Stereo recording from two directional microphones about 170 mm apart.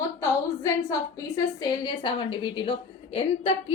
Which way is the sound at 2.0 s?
30° left (ahead or behind).